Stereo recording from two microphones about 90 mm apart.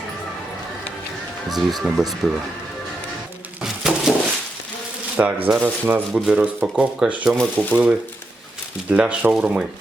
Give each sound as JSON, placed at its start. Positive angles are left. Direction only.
{"t": 1.5, "sound": "speech", "side_deg": -5}
{"t": 3.6, "sound": "a sound", "side_deg": -5}
{"t": 5.1, "sound": "speech", "side_deg": -15}